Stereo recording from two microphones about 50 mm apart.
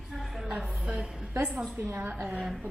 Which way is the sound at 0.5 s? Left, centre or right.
Right.